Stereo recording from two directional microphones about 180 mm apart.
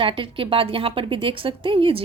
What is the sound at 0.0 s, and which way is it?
Speech, 30° right (ahead or behind).